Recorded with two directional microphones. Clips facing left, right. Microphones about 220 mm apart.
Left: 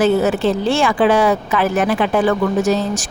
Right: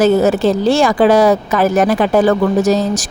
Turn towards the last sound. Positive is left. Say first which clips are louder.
# right 3 dB
turn(degrees=-40)  # may be behind; listen again after turning